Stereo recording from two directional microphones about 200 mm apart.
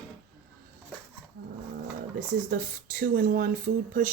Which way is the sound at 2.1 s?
45° right (ahead or behind).